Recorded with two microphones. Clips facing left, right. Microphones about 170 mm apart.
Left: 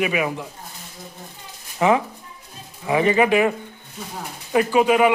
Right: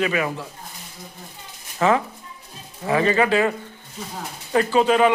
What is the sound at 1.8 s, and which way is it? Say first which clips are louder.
A man's voice: left 1 dB; 15° left (ahead or behind).